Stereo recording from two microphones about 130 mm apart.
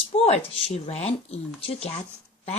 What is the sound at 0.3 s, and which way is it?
A woman's voice, 50° left (ahead or behind).